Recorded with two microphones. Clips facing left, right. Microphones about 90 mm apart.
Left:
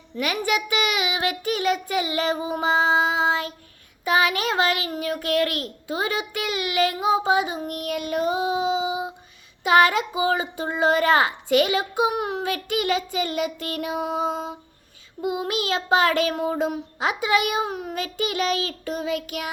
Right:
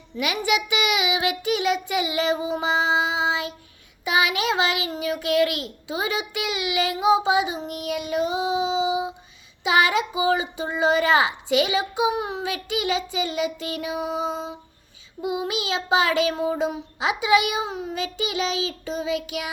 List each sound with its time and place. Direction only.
0.2 s child singing: 45° left (ahead or behind); by 14.5 s 60° left (ahead or behind)
15.4 s child singing: 50° left (ahead or behind)